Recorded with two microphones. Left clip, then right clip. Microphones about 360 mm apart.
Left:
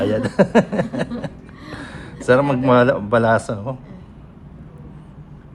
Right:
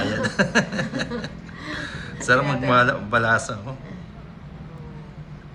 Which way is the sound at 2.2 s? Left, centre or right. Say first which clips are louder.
Left 4 dB; centre.